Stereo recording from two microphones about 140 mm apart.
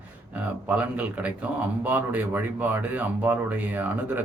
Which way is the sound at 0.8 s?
10° right (ahead or behind).